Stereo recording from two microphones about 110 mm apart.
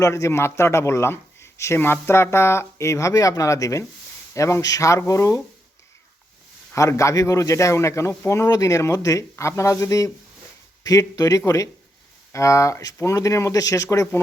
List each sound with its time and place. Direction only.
0.0 s speech: 30° left (ahead or behind)
6.7 s speech: 30° left (ahead or behind)